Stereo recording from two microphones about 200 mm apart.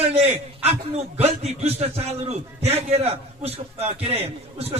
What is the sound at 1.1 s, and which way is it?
A man's voice, 30° right (ahead or behind).